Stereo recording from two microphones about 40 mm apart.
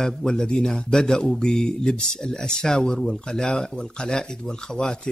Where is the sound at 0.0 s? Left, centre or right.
Centre.